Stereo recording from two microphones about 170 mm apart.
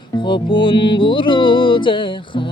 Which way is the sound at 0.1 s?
30° left (ahead or behind).